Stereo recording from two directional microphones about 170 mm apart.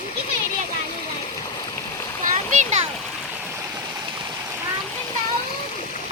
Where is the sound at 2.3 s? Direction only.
45° right (ahead or behind).